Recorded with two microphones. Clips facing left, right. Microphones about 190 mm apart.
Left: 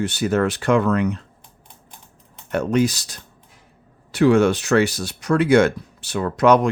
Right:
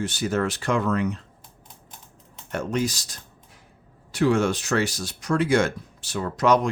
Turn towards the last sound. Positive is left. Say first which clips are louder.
# left 5 dB
turn(degrees=60)  # may be behind; listen again after turning